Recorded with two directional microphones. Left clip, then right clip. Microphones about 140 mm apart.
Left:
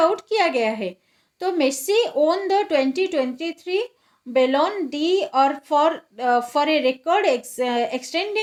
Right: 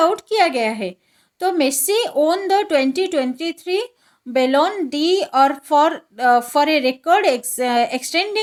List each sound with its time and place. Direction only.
0.0 s speech: 50° right (ahead or behind)